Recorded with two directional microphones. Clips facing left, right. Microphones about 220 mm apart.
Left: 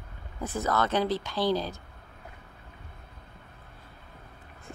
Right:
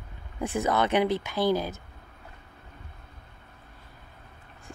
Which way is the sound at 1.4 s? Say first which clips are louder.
Right 2 dB; 50° right (ahead or behind).